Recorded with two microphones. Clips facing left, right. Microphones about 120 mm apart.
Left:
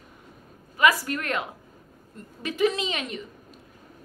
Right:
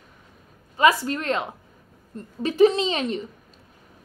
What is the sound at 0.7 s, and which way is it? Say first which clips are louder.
A woman's voice: right 3 dB; 25° right (ahead or behind).